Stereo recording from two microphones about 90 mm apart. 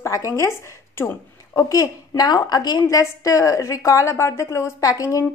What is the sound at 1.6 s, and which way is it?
Speech, 40° left (ahead or behind).